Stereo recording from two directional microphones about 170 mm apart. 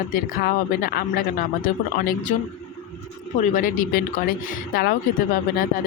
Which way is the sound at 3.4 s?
50° left (ahead or behind).